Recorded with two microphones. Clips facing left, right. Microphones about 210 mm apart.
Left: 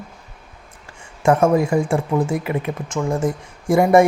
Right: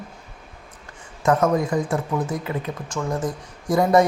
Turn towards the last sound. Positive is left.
turn(degrees=25)  # may be behind; listen again after turning